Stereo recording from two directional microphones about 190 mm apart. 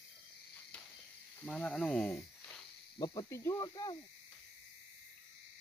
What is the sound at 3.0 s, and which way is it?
Speech, 20° left (ahead or behind).